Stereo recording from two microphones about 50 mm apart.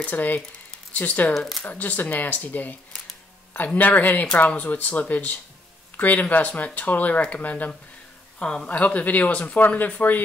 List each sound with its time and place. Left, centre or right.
0.0 s speech: left
1.3 s speech: centre
1.7 s speech: left